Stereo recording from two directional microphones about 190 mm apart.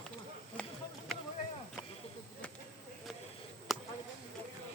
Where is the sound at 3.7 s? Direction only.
Centre (ahead or behind).